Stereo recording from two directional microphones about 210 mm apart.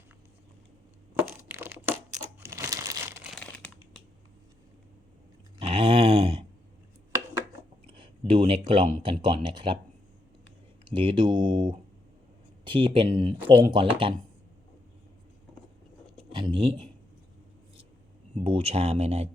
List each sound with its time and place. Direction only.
1.2 s crushing: 10° right (ahead or behind)
2.4 s crumpling: 15° right (ahead or behind)
3.3 s crumpling: 5° left (ahead or behind)
5.5 s a sound: 25° right (ahead or behind)
7.9 s a sound: 25° right (ahead or behind)
9.0 s speech: 25° right (ahead or behind)
10.9 s speech: 25° right (ahead or behind)
16.3 s speech: 25° right (ahead or behind)
18.3 s speech: 30° right (ahead or behind)